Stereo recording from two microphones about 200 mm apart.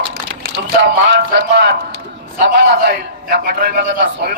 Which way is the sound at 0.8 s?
50° right (ahead or behind).